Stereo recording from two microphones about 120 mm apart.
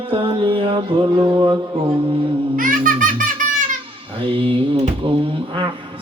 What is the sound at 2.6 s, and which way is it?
Baby laughter, 90° right.